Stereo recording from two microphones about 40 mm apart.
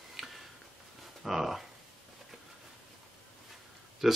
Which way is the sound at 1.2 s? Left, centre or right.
Centre.